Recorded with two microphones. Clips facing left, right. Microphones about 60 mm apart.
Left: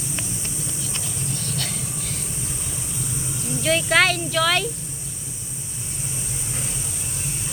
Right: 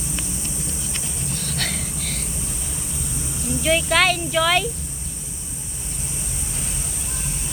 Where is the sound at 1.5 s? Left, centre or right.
Right.